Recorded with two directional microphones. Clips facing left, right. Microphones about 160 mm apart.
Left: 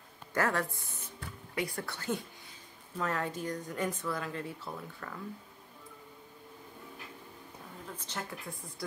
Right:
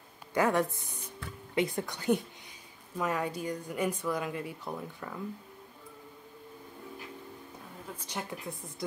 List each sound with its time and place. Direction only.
0.3 s speech: 15° right (ahead or behind)
7.9 s a woman's voice: 10° right (ahead or behind)